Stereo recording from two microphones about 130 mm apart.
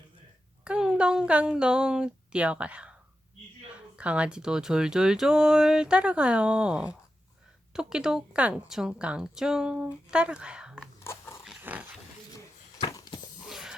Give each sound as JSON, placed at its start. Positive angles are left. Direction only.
{"t": 0.6, "sound": "a woman's voice", "side_deg": -5}
{"t": 11.0, "sound": "biting", "side_deg": 20}
{"t": 11.6, "sound": "pig", "side_deg": -10}
{"t": 13.5, "sound": "a sound", "side_deg": -5}